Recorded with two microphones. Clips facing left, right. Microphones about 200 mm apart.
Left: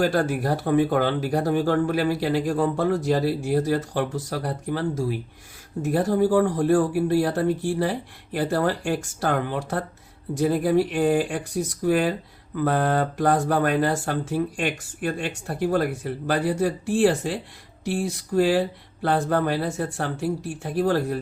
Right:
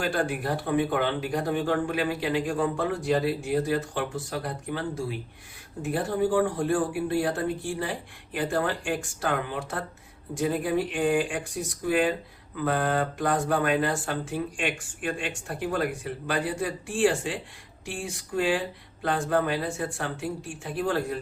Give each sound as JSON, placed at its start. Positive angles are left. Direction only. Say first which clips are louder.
{"t": 0.0, "sound": "speech", "louder": "left 5 dB", "side_deg": 40}